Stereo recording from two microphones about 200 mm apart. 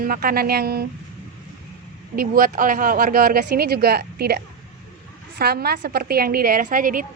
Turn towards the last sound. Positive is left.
turn(degrees=-45)  # may be behind; listen again after turning